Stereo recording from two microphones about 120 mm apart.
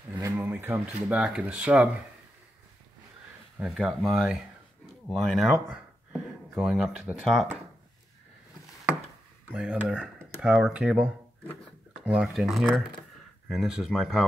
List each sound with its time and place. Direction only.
0.2 s a sound: 15° right (ahead or behind)
1.0 s speech: 10° right (ahead or behind)
3.5 s speech: 5° right (ahead or behind)
9.5 s speech: 10° right (ahead or behind)